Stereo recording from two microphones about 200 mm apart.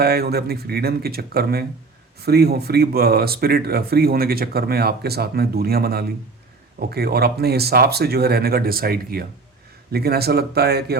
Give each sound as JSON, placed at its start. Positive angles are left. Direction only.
{"t": 0.0, "sound": "speech", "side_deg": -50}